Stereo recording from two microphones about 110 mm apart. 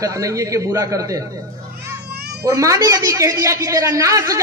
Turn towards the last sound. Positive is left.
turn(degrees=-30)  # may be behind; listen again after turning